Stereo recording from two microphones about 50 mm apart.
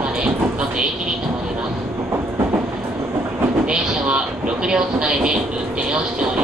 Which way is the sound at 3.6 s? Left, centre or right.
Right.